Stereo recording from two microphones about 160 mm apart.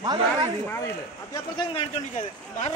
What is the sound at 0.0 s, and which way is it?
Speech, 25° right (ahead or behind).